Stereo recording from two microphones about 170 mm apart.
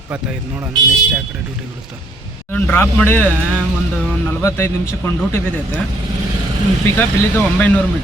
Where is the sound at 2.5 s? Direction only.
10° left (ahead or behind).